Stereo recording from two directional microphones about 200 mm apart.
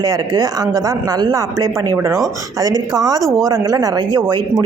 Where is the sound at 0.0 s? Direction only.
20° right (ahead or behind).